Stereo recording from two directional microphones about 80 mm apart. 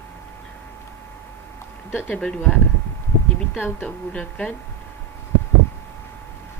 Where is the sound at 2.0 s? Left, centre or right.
Centre.